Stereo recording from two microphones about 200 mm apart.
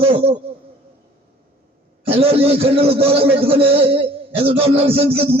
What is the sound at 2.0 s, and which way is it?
Speech, 30° right (ahead or behind).